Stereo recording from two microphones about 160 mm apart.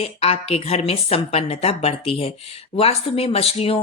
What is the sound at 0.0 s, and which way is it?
A woman's voice, 40° left (ahead or behind).